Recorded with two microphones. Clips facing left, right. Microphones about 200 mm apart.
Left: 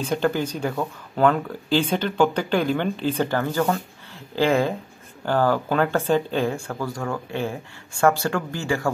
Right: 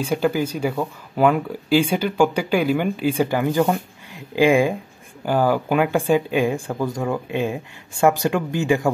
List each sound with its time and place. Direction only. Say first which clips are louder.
0.0 s speech: right 2 dB; 10° right (ahead or behind)